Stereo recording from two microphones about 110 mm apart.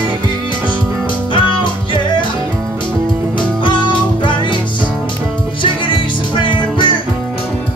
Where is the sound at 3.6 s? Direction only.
50° left (ahead or behind).